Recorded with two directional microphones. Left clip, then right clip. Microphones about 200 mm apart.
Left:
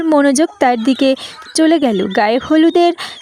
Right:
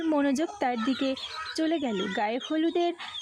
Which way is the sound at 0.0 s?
45° left (ahead or behind).